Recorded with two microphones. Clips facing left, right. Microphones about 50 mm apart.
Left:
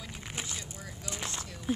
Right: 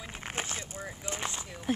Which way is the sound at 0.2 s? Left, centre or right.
Right.